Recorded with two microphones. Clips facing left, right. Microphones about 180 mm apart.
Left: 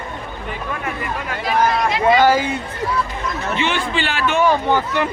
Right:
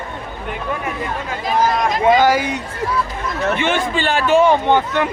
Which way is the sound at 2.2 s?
10° right (ahead or behind).